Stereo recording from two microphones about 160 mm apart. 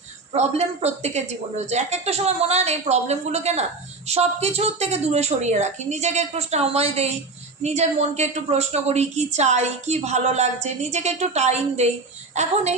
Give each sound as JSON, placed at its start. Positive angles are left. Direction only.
{"t": 0.3, "sound": "a woman's voice", "side_deg": -40}